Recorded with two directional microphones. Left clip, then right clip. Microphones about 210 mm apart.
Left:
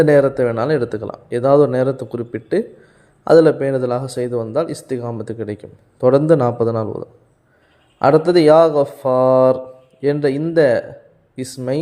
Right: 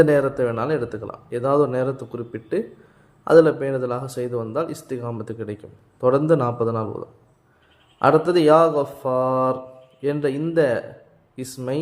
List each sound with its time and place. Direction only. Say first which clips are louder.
0.0 s speech: left 4 dB; 25° left (ahead or behind)